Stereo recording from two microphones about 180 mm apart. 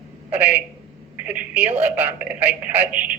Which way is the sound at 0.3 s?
10° right (ahead or behind).